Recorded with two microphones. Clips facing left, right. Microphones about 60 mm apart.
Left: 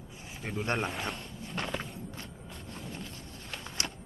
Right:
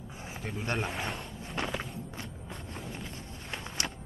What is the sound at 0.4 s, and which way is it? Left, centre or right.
Speech, centre.